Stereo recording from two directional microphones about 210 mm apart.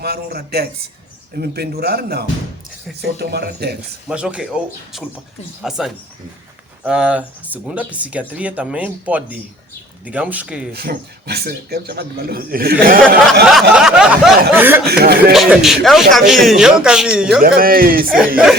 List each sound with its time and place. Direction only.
0.0 s a man's voice: 50° right (ahead or behind)
4.1 s a man's voice: 5° right (ahead or behind)
10.7 s a man's voice: 50° right (ahead or behind)
13.5 s a man's voice: centre (ahead or behind)
14.8 s a man's voice: 50° right (ahead or behind)
15.3 s a man's voice: centre (ahead or behind)
17.6 s a man's voice: 45° right (ahead or behind)